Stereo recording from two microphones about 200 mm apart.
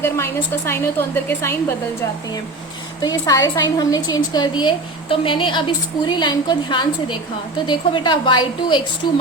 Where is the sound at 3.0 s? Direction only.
20° left (ahead or behind).